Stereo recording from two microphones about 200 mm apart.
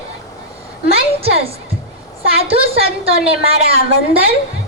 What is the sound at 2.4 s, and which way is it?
Child singing, 30° right (ahead or behind).